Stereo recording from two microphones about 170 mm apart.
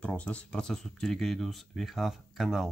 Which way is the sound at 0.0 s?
5° left (ahead or behind).